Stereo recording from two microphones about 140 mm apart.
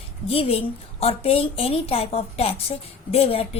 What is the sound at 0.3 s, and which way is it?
A woman's voice, 45° left (ahead or behind).